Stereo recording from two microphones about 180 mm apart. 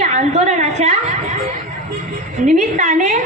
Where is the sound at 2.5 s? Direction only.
45° right (ahead or behind).